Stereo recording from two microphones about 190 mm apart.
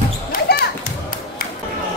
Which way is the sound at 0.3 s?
55° left (ahead or behind).